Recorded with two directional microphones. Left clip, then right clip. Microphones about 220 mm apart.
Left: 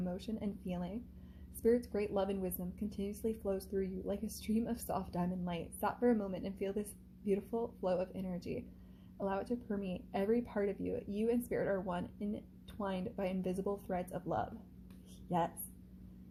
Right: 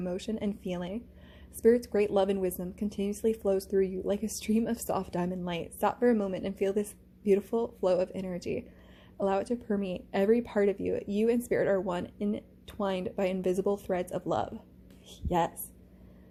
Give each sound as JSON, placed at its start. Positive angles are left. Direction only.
{"t": 0.0, "sound": "a woman's voice", "side_deg": -30}